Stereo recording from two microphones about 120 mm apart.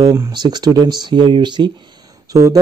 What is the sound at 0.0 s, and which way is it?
Speech, 20° right (ahead or behind).